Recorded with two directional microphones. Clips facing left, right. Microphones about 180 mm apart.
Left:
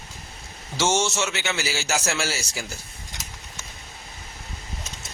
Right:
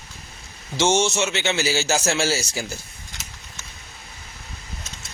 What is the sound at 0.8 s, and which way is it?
A man's voice, 20° right (ahead or behind).